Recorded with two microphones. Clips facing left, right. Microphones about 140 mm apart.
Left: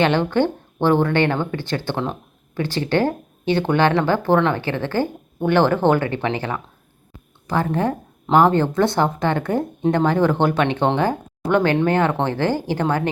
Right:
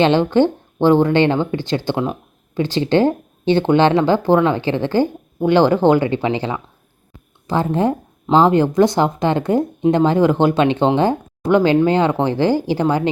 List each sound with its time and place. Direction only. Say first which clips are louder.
0.0 s speech: right 4 dB; 20° right (ahead or behind)